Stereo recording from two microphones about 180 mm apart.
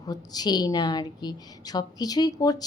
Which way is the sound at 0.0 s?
20° left (ahead or behind).